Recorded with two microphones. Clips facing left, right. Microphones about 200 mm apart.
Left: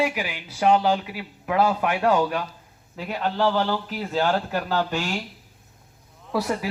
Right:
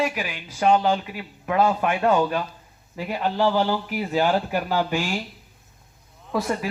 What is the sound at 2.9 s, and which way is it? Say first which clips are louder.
Speech: right 1 dB; 10° right (ahead or behind).